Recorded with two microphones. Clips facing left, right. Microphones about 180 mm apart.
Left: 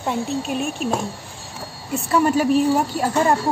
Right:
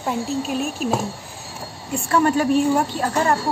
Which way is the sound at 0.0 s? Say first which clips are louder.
Even; centre (ahead or behind).